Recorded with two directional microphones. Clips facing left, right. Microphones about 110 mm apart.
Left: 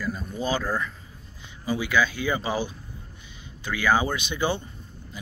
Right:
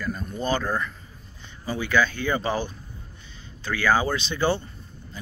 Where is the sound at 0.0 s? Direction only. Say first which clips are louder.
Even; 5° left (ahead or behind).